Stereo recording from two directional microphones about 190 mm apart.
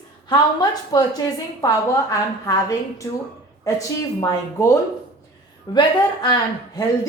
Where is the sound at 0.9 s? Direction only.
20° left (ahead or behind).